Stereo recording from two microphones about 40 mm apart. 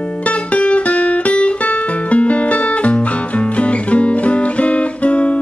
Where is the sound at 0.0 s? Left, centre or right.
Left.